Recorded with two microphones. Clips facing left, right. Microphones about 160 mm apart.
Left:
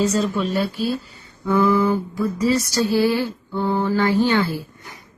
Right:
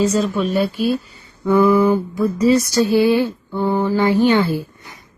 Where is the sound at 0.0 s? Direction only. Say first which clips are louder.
Right 3 dB; 10° right (ahead or behind).